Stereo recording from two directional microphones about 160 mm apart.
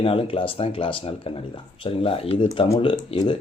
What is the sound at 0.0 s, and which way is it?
A man's voice, 35° left (ahead or behind).